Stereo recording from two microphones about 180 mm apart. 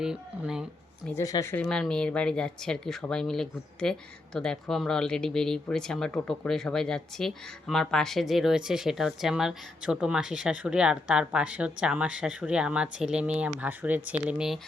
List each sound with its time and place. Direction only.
0.0 s speech: 5° right (ahead or behind)
1.1 s speech: 20° left (ahead or behind)
1.6 s speech: 5° left (ahead or behind)